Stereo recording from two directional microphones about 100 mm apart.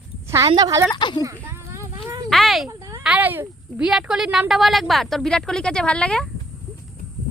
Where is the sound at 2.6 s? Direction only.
35° right (ahead or behind).